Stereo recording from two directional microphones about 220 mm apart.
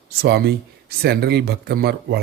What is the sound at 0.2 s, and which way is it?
Speech, 45° right (ahead or behind).